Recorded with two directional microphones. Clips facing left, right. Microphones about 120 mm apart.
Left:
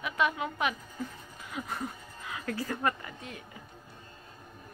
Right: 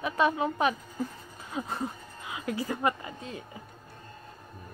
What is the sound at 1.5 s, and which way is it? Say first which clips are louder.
Music: right 3 dB; 25° right (ahead or behind).